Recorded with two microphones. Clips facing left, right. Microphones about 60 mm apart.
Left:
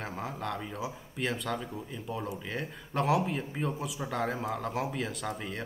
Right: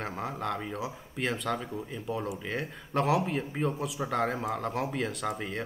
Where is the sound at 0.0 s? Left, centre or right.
Centre.